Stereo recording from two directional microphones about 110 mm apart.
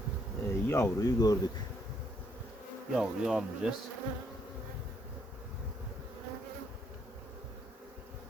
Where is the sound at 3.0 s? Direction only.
5° right (ahead or behind).